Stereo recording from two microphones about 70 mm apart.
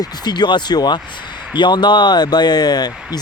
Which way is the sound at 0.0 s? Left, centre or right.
Left.